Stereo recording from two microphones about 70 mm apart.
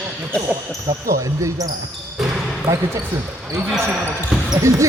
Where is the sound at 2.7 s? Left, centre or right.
Right.